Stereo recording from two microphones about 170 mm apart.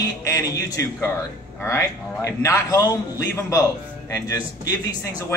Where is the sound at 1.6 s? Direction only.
15° left (ahead or behind).